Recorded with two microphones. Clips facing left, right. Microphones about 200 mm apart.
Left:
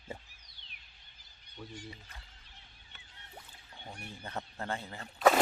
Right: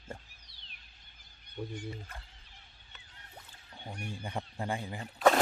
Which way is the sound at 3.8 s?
10° right (ahead or behind).